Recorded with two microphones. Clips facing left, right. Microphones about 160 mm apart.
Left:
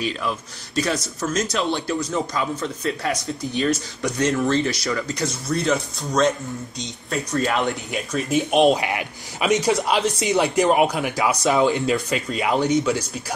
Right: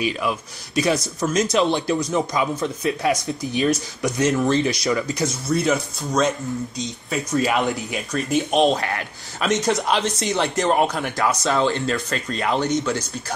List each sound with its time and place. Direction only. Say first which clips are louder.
0.0 s speech: right 2 dB; 10° right (ahead or behind)
8.7 s speech: left 1 dB; 15° left (ahead or behind)
11.8 s speech: left 2 dB; 5° left (ahead or behind)